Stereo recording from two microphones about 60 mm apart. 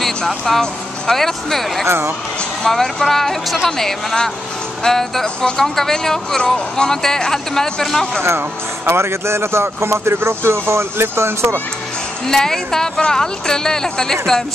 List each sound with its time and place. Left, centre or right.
0.5 s speech: centre
1.9 s speech: right
2.6 s speech: centre
8.2 s speech: right
12.3 s speech: centre